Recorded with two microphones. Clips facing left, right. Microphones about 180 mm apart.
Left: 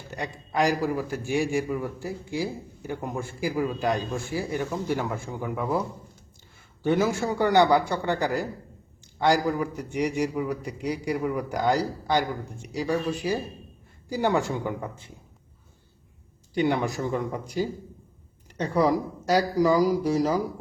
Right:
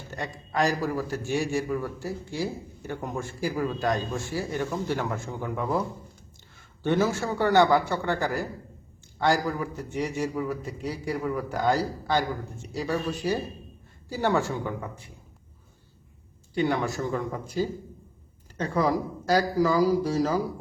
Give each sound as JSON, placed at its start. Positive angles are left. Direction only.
{"t": 0.1, "sound": "a man's voice", "side_deg": 10}
{"t": 6.8, "sound": "a man's voice", "side_deg": 10}
{"t": 16.6, "sound": "a man's voice", "side_deg": 20}